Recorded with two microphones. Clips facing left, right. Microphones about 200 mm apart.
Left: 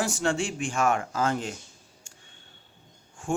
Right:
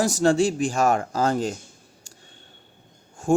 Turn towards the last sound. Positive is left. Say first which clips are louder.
# right 9 dB
turn(degrees=-40)  # may be behind; listen again after turning